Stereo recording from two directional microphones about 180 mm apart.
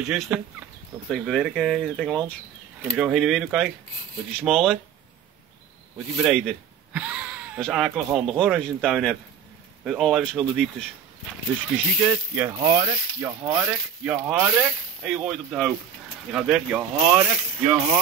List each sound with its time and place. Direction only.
0.0 s speech: 5° right (ahead or behind)
5.9 s speech: 5° right (ahead or behind)
12.4 s speech: 20° right (ahead or behind)
13.4 s speech: 5° right (ahead or behind)